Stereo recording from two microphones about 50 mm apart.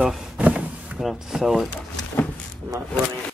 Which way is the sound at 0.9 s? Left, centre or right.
Centre.